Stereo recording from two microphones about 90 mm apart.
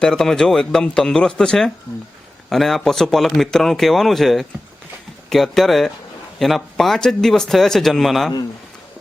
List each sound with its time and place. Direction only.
0.0 s speech: 5° left (ahead or behind)